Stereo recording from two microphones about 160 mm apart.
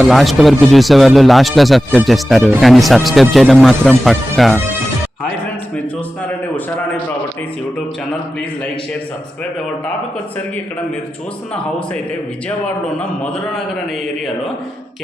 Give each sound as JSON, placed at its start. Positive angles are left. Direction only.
{"t": 0.0, "sound": "speech", "side_deg": 0}
{"t": 12.5, "sound": "a man's voice", "side_deg": 5}